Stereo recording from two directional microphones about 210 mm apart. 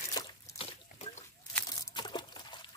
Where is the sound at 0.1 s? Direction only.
20° left (ahead or behind).